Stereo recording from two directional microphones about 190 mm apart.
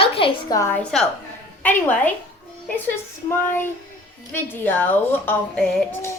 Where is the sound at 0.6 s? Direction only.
10° left (ahead or behind).